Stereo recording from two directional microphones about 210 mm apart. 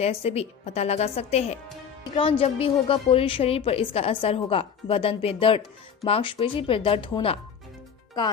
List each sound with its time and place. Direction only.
0.0 s a woman's voice: 30° left (ahead or behind)